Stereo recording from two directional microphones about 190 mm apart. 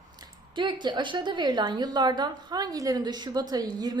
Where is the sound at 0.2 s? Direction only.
25° right (ahead or behind).